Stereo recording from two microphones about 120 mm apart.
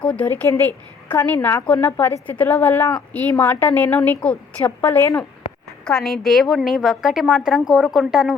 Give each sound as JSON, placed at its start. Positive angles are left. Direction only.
{"t": 0.0, "sound": "a woman's voice", "side_deg": 10}
{"t": 5.8, "sound": "a woman's voice", "side_deg": 5}